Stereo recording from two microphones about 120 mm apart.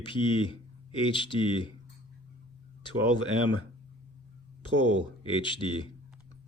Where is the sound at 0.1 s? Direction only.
45° left (ahead or behind).